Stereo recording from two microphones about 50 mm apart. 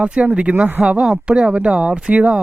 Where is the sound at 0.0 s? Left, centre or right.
Right.